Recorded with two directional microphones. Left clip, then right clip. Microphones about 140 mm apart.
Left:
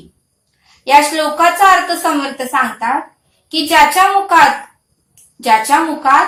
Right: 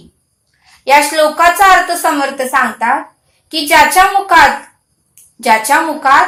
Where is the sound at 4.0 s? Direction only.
40° right (ahead or behind).